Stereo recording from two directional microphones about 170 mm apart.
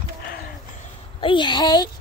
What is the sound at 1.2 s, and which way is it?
Speech, 25° left (ahead or behind).